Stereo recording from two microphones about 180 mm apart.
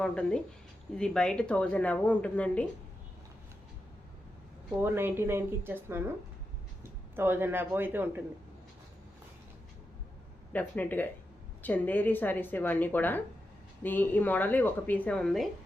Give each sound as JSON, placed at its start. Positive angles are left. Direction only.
{"t": 0.0, "sound": "speech", "side_deg": 5}
{"t": 4.8, "sound": "speech", "side_deg": -10}
{"t": 7.2, "sound": "speech", "side_deg": -10}
{"t": 10.5, "sound": "speech", "side_deg": 10}